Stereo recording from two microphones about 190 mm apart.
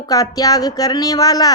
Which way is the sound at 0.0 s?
20° left (ahead or behind).